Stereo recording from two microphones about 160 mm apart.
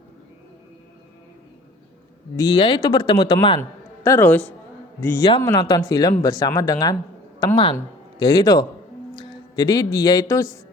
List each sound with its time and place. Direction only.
2.3 s speech: 25° left (ahead or behind)
3.6 s a man's voice: 15° left (ahead or behind)